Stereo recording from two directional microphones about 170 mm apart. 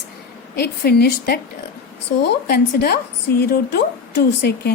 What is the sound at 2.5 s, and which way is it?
A woman's voice, 65° left (ahead or behind).